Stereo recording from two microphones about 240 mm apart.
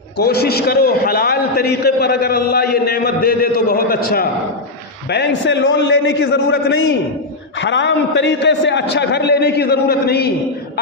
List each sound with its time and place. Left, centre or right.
0.2 s a man's voice: left